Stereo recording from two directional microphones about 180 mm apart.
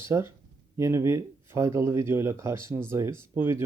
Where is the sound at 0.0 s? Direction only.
15° right (ahead or behind).